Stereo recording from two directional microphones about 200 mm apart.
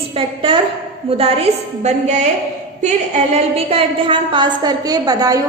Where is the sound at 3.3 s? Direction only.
30° right (ahead or behind).